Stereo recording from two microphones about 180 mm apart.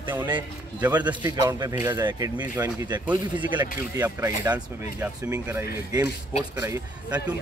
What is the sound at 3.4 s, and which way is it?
Speech, 25° right (ahead or behind).